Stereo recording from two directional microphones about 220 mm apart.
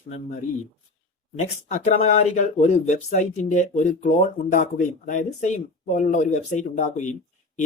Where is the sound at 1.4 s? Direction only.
30° left (ahead or behind).